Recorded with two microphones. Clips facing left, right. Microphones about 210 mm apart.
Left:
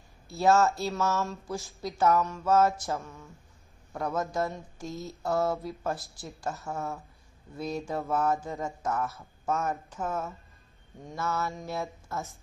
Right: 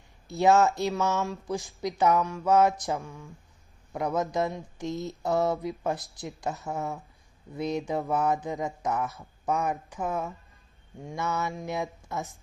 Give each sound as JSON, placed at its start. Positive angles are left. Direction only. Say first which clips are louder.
{"t": 0.3, "sound": "speech", "louder": "right 2 dB", "side_deg": -15}